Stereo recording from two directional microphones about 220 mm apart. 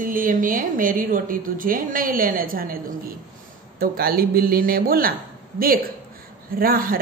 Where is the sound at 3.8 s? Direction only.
40° right (ahead or behind).